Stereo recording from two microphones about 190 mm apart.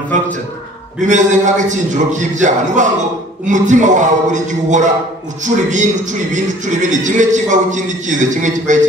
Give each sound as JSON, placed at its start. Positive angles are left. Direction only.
{"t": 1.0, "sound": "a man's voice", "side_deg": -40}